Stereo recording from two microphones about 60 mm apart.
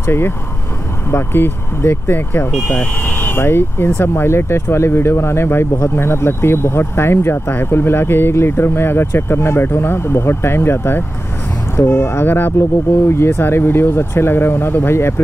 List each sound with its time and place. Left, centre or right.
0.0 s speech: left
2.7 s speech: left